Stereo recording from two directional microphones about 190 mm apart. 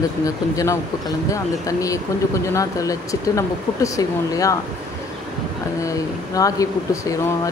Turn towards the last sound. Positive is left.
turn(degrees=15)  # may be behind; listen again after turning